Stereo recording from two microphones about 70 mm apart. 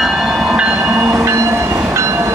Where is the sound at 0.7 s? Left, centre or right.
Right.